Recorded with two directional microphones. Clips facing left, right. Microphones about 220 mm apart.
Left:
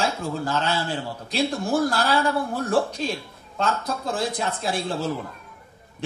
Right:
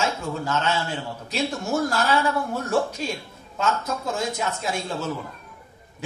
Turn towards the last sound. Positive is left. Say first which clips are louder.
# left 2 dB
turn(degrees=35)  # may be behind; listen again after turning